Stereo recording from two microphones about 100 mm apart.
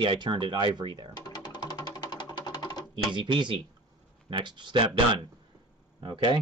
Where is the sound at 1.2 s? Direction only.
45° left (ahead or behind).